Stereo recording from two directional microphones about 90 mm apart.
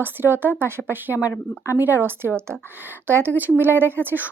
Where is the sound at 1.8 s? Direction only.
20° right (ahead or behind).